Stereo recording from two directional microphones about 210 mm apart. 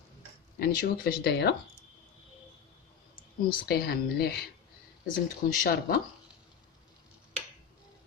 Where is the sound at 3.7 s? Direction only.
50° left (ahead or behind).